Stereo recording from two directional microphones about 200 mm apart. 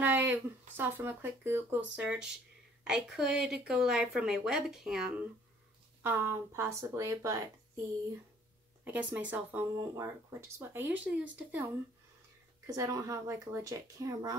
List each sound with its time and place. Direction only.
0.0 s a woman's voice: 10° right (ahead or behind)
8.8 s speech: 10° right (ahead or behind)
12.6 s speech: 15° right (ahead or behind)